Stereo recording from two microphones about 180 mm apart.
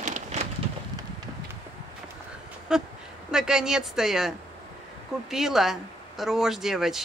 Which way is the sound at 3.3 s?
5° right (ahead or behind).